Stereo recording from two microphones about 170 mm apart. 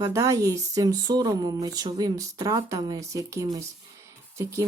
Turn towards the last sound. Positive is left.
turn(degrees=-15)  # may be behind; listen again after turning